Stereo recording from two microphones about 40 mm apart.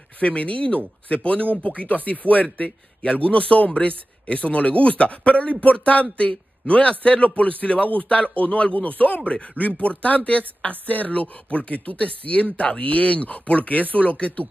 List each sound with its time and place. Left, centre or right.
0.2 s speech: left
8.7 s speech: left